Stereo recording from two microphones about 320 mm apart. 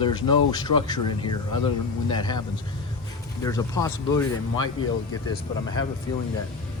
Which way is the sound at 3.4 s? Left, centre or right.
Centre.